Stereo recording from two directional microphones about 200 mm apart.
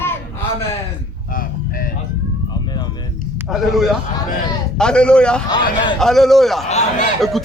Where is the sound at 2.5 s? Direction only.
20° left (ahead or behind).